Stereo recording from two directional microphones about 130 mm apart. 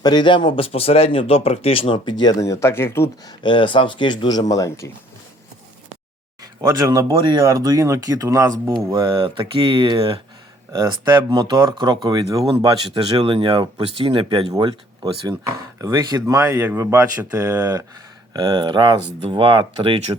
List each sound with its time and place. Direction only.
0.0 s speech: 35° left (ahead or behind); by 3.1 s 20° left (ahead or behind)
3.2 s speech: 40° left (ahead or behind)
6.4 s speech: 30° right (ahead or behind)
9.2 s speech: 40° right (ahead or behind)
12.9 s speech: 40° right (ahead or behind)
16.6 s speech: 15° right (ahead or behind)
17.3 s speech: 25° right (ahead or behind); by 20.1 s 45° right (ahead or behind)